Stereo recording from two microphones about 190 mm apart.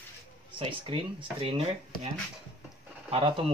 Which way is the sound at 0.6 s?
25° right (ahead or behind).